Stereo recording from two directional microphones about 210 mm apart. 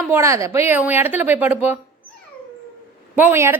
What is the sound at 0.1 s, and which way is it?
Speech, 15° right (ahead or behind).